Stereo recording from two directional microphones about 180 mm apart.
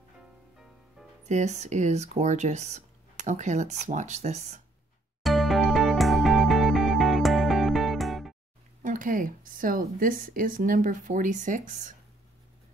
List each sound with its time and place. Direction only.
1.2 s speech: 40° right (ahead or behind)
5.2 s music: centre (ahead or behind)
8.8 s a woman's voice: 50° right (ahead or behind)